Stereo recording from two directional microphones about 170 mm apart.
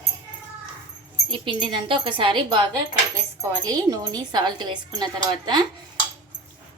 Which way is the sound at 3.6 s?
20° right (ahead or behind).